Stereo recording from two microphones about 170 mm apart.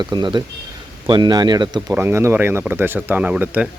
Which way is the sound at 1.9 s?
15° right (ahead or behind).